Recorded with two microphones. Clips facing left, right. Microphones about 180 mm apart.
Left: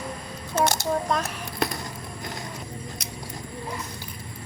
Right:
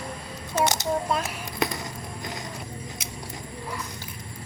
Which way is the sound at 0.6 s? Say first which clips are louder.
Left 1 dB; 20° right (ahead or behind).